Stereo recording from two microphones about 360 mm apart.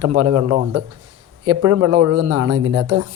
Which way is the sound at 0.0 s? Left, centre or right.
Right.